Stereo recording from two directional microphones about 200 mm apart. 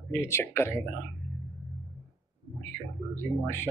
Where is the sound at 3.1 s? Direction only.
10° left (ahead or behind).